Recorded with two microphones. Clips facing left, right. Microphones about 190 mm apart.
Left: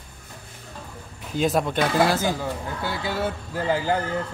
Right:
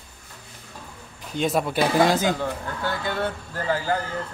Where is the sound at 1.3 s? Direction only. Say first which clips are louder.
Left 1 dB; centre (ahead or behind); by 2.4 s 20° right (ahead or behind).